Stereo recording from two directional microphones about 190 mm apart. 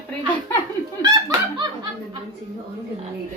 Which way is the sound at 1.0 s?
20° right (ahead or behind).